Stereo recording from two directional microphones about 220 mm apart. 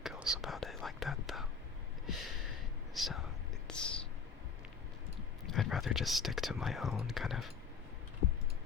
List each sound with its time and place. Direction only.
0.0 s whispering: centre (ahead or behind)
2.9 s whispering: centre (ahead or behind)
3.7 s a sound: 5° left (ahead or behind)
5.5 s speech: centre (ahead or behind)